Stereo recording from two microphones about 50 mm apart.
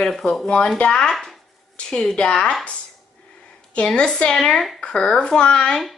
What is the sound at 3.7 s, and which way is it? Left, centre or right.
A woman's voice, left.